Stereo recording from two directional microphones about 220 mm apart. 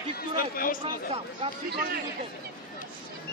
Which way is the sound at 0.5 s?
40° left (ahead or behind).